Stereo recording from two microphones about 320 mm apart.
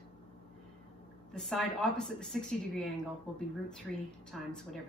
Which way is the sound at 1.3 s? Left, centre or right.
Centre.